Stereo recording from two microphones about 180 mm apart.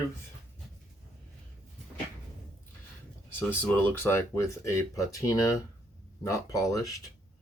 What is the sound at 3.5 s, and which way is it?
Speech, 10° left (ahead or behind).